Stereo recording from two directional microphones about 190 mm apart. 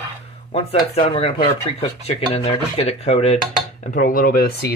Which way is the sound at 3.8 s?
45° left (ahead or behind).